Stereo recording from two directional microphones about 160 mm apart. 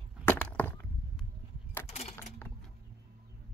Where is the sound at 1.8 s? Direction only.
40° left (ahead or behind).